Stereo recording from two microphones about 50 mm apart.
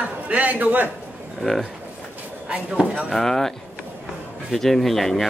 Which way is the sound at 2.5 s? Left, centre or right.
Centre.